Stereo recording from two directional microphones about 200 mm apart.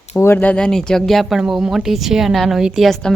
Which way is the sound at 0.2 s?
10° left (ahead or behind).